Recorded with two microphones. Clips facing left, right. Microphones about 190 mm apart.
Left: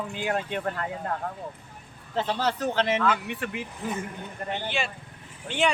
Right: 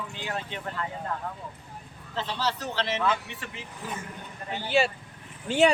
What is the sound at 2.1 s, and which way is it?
Speech, 50° left (ahead or behind).